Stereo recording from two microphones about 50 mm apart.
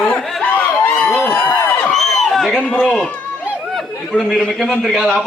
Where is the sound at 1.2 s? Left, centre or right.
Left.